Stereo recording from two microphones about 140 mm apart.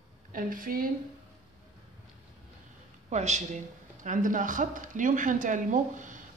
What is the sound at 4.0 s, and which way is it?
Speech, 65° right (ahead or behind).